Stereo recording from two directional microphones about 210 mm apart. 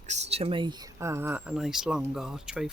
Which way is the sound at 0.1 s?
30° right (ahead or behind).